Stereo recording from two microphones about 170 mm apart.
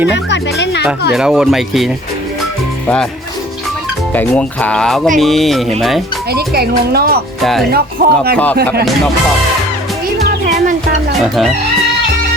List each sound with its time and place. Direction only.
0.3 s speech: 90° left
1.1 s speech: 5° right (ahead or behind)
4.1 s speech: 10° left (ahead or behind)
6.3 s speech: 70° right (ahead or behind)
7.4 s speech: centre (ahead or behind)
7.7 s speech: 65° right (ahead or behind)
11.2 s speech: centre (ahead or behind)